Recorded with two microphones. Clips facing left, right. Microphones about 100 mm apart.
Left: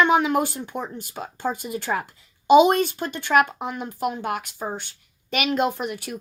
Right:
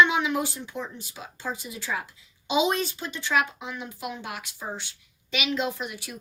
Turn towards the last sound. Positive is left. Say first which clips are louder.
# left 5 dB
turn(degrees=50)  # may be behind; listen again after turning